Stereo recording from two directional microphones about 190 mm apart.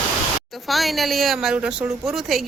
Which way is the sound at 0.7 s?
Centre (ahead or behind).